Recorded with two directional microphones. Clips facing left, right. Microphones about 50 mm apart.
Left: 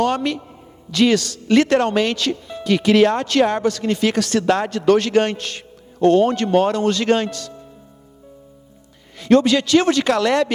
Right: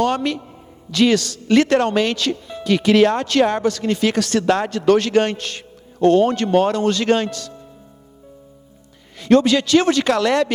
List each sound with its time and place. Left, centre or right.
0.0 s a man's voice: centre
9.3 s speech: centre